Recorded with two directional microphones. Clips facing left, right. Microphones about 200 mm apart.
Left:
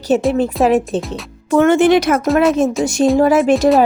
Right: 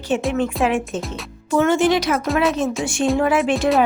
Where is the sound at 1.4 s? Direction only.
55° left (ahead or behind).